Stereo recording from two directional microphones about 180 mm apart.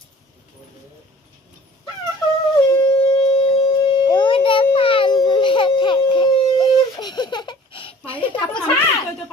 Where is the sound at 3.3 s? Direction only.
35° left (ahead or behind).